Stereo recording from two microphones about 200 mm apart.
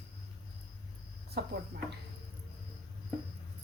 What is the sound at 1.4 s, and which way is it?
Speech, 55° right (ahead or behind).